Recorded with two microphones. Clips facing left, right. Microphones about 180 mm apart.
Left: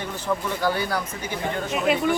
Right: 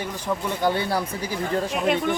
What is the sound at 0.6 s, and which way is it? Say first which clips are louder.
Speech: right 2 dB; 25° right (ahead or behind).